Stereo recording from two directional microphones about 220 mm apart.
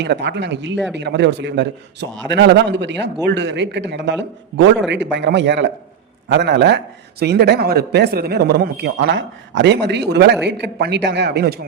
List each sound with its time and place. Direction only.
0.0 s a man's voice: 50° right (ahead or behind)